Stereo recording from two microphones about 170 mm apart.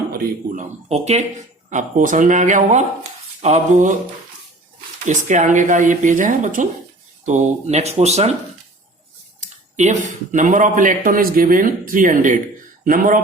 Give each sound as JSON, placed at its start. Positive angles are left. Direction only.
{"t": 0.9, "sound": "speech", "side_deg": -40}
{"t": 5.0, "sound": "speech", "side_deg": -45}
{"t": 9.4, "sound": "speech", "side_deg": -45}